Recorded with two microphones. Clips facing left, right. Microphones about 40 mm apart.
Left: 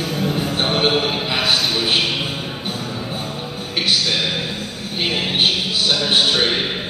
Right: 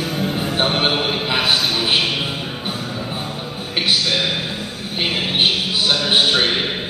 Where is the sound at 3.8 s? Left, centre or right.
Centre.